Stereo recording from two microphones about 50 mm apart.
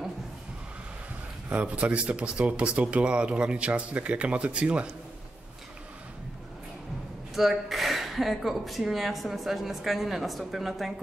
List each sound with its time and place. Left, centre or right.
1.5 s speech: right
7.3 s speech: centre